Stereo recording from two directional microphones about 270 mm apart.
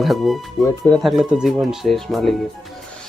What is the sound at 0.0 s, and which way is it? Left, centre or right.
Speech, centre.